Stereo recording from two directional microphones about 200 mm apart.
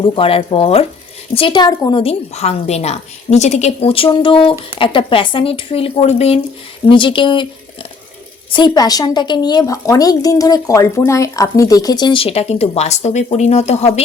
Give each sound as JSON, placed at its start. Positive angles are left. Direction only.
{"t": 0.2, "sound": "speech", "side_deg": 30}